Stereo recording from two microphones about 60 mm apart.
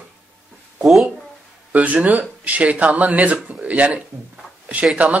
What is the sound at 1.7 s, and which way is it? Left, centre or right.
Speech, right.